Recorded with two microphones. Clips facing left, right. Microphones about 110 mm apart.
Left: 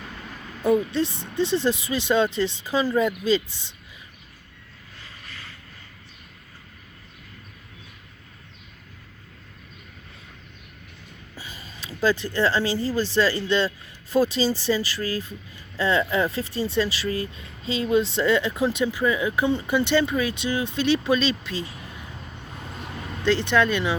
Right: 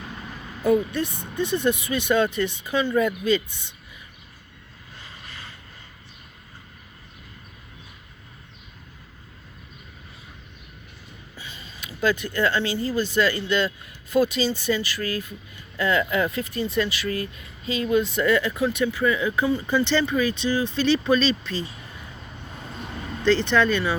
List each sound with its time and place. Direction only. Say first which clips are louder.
0.9 s speech: left 2 dB; 30° left (ahead or behind)
4.9 s vehicle: right 1 dB; 20° right (ahead or behind)
11.3 s speech: left 1 dB; 40° left (ahead or behind); by 19.0 s 20° left (ahead or behind)
19.0 s speech: even; 10° left (ahead or behind)
23.2 s speech: right 1 dB; 10° left (ahead or behind)